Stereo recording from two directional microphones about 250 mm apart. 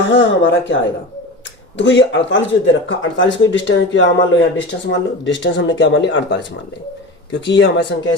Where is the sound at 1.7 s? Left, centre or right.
Left.